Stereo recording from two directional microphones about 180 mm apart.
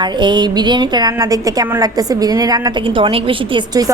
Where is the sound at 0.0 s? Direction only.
25° right (ahead or behind).